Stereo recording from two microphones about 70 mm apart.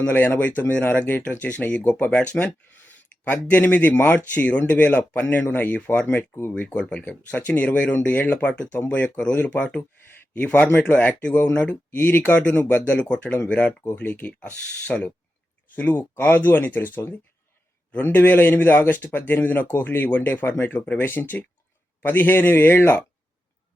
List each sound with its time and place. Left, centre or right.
0.0 s speech: left
11.9 s speech: left
12.2 s speech: centre